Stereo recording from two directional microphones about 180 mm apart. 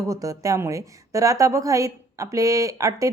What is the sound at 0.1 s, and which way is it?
A woman's voice, 20° right (ahead or behind).